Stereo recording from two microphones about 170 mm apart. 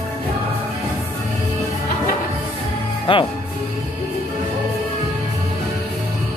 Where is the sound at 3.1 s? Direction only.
30° left (ahead or behind).